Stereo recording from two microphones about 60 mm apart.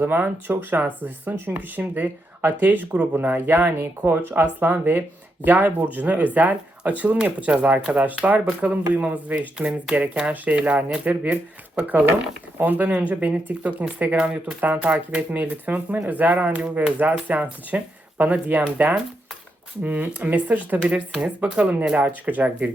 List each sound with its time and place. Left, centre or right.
0.0 s speech: right
9.6 s speech: centre
12.5 s speech: right